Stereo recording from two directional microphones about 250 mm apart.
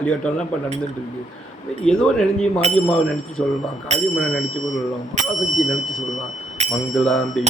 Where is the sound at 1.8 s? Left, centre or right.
Centre.